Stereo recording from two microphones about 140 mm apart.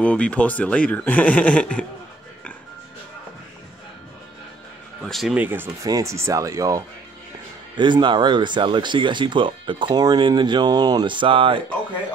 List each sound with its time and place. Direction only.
0.0 s speech: 10° left (ahead or behind)
5.0 s speech: centre (ahead or behind)
5.3 s speech: 15° right (ahead or behind)
7.7 s speech: 35° right (ahead or behind)